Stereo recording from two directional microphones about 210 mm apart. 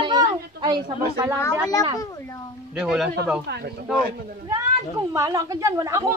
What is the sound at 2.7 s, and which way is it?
Speech, 5° right (ahead or behind).